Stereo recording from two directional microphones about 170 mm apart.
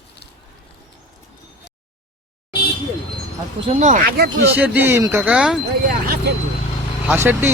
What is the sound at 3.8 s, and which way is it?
Speech, 50° right (ahead or behind).